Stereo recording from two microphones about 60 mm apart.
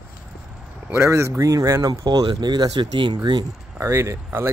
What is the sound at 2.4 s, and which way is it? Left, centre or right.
Speech, right.